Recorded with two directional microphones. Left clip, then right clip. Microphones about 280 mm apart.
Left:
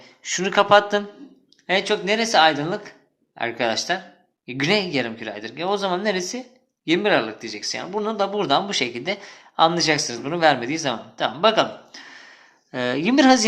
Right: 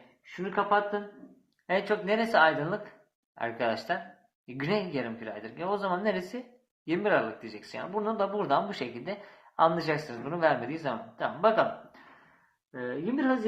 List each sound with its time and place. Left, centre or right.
0.2 s speech: left
12.7 s speech: left